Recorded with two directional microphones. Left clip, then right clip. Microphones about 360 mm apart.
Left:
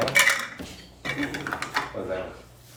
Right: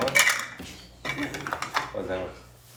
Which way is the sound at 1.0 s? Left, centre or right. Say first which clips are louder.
Left 2 dB; centre.